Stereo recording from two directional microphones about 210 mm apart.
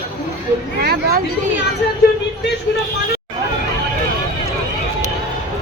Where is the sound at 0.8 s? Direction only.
50° right (ahead or behind).